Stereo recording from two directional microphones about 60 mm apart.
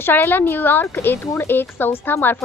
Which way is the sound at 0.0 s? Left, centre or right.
Left.